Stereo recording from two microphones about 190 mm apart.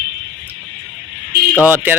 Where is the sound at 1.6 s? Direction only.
10° right (ahead or behind).